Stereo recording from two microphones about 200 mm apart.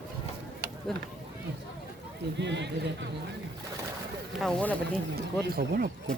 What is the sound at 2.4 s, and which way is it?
Speech, 60° right (ahead or behind).